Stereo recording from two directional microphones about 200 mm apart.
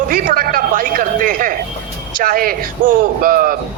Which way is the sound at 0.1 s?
45° right (ahead or behind).